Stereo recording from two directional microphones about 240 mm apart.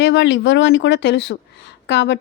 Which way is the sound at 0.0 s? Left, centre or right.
Left.